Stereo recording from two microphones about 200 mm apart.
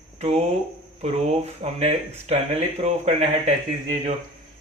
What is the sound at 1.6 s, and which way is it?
Speech, 35° right (ahead or behind).